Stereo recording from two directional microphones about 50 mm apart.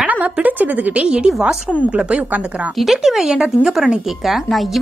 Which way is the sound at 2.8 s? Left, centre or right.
Centre.